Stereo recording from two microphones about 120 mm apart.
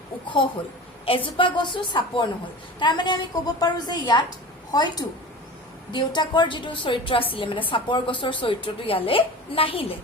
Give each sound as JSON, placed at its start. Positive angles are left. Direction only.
{"t": 1.0, "sound": "a woman's voice", "side_deg": 45}